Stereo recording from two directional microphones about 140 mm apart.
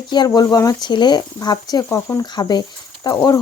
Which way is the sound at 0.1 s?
30° left (ahead or behind).